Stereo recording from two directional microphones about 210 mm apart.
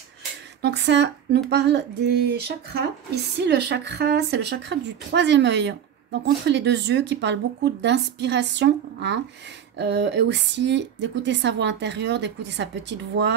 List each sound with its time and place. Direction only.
0.6 s a woman's voice: 55° right (ahead or behind)